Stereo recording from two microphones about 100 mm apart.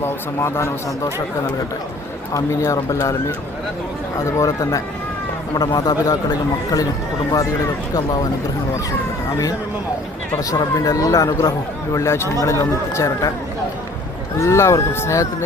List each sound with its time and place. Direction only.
0.0 s speech: 25° left (ahead or behind)
2.3 s speech: 30° left (ahead or behind)
4.4 s speech: 35° left (ahead or behind)
7.3 s speech: 35° left (ahead or behind)
10.5 s speech: 40° left (ahead or behind)
11.9 s speech: 25° left (ahead or behind)
14.3 s speech: 30° left (ahead or behind)